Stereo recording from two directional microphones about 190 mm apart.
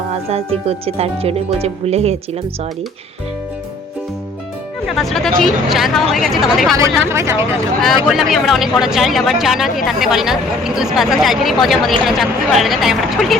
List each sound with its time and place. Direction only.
0.1 s speech: 30° right (ahead or behind)
4.9 s speech: centre (ahead or behind)
6.7 s speech: 15° right (ahead or behind)
8.0 s speech: centre (ahead or behind)